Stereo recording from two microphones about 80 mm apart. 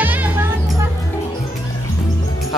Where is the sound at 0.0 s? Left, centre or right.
Right.